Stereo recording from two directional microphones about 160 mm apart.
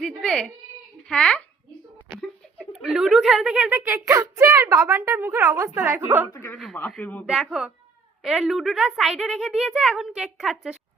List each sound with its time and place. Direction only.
0.0 s a sound: 5° left (ahead or behind)
1.0 s a woman's voice: 5° left (ahead or behind)
2.8 s a woman's voice: 5° right (ahead or behind)
6.3 s a man's voice: 15° left (ahead or behind)
7.3 s a woman's voice: 5° right (ahead or behind)